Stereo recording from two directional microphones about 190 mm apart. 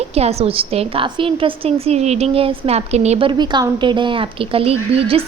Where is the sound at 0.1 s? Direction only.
35° right (ahead or behind).